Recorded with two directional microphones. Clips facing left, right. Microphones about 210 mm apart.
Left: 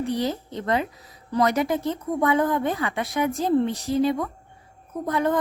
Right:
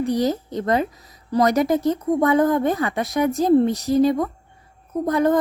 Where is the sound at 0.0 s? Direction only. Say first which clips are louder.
Right 5 dB; 40° right (ahead or behind).